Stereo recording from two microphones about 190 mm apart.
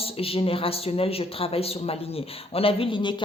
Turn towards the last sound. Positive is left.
turn(degrees=25)  # may be behind; listen again after turning